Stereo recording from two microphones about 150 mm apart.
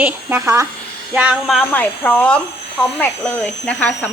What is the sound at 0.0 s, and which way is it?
Speech, 15° right (ahead or behind).